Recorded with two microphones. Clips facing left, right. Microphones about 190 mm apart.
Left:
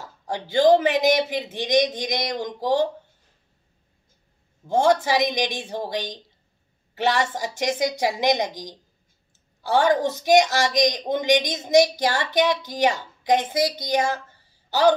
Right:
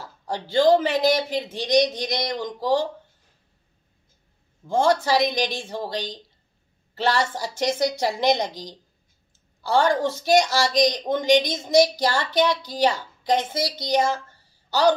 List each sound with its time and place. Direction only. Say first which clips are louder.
0.0 s a woman's voice: even; 15° left (ahead or behind)
4.6 s a woman's voice: left 1 dB; 15° left (ahead or behind)